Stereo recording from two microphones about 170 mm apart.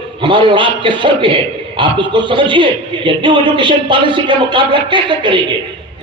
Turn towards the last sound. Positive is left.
turn(degrees=-30)  # may be behind; listen again after turning